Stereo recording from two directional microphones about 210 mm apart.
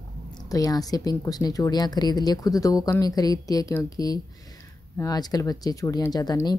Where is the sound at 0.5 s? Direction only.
15° left (ahead or behind).